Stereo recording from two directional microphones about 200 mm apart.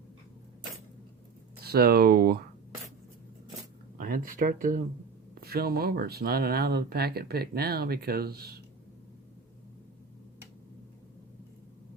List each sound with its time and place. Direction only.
1.6 s speech: 50° right (ahead or behind)
4.0 s speech: 50° right (ahead or behind)